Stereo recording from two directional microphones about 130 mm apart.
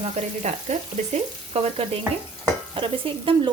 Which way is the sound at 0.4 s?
60° right (ahead or behind).